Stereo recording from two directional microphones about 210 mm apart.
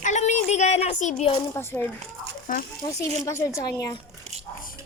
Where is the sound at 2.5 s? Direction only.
40° left (ahead or behind).